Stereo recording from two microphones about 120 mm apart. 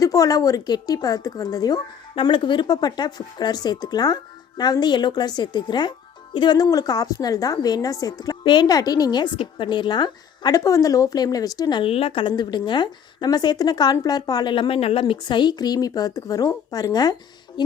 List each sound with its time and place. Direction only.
0.0 s a woman's voice: 30° left (ahead or behind)
2.1 s a woman's voice: 45° left (ahead or behind)
11.8 s a woman's voice: 55° left (ahead or behind); by 17.2 s 35° left (ahead or behind)